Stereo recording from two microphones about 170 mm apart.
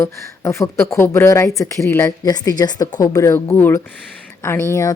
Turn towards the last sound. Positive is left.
turn(degrees=20)  # may be behind; listen again after turning